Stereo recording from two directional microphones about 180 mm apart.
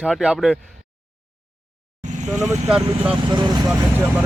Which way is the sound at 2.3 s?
Centre (ahead or behind).